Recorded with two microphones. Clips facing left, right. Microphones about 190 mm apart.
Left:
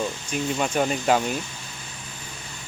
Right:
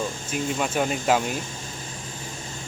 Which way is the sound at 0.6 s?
5° right (ahead or behind).